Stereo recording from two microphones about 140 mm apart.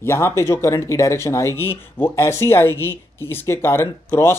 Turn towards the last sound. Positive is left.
turn(degrees=20)  # may be behind; listen again after turning